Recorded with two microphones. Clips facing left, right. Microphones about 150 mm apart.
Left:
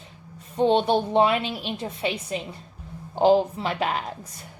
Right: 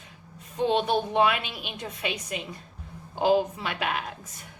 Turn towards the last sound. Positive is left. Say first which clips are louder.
# left 4 dB
turn(degrees=35)  # may be behind; listen again after turning